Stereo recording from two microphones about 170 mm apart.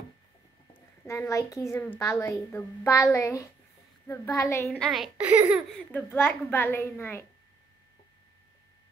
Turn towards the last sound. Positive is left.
turn(degrees=15)  # may be behind; listen again after turning